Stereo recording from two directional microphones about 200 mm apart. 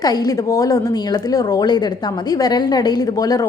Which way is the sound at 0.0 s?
20° left (ahead or behind).